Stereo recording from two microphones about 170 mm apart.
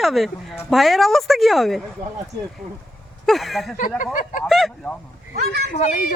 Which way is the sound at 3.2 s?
Centre (ahead or behind).